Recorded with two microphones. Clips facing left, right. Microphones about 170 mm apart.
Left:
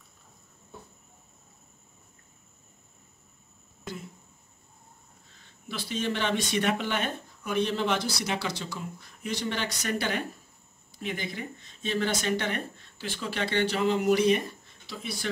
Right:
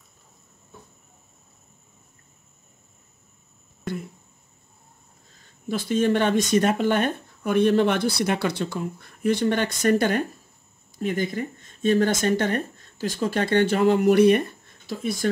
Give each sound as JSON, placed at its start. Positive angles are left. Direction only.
{"t": 5.7, "sound": "speech", "side_deg": -50}
{"t": 14.9, "sound": "speech", "side_deg": -45}